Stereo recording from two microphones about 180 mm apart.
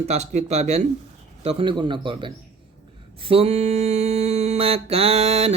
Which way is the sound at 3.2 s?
30° right (ahead or behind).